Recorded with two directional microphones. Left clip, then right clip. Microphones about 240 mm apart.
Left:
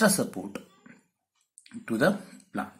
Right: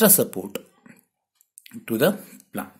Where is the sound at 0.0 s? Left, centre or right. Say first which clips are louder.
Right 5 dB; right.